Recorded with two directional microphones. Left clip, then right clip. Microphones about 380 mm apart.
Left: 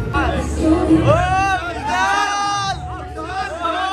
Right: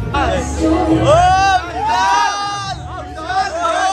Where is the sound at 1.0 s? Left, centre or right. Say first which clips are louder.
Right 5 dB; centre.